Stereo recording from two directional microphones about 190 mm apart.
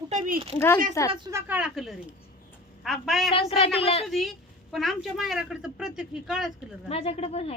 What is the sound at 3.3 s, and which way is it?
Speech, 30° left (ahead or behind).